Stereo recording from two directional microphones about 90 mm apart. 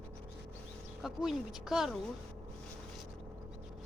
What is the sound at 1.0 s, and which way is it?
Speech, 5° right (ahead or behind).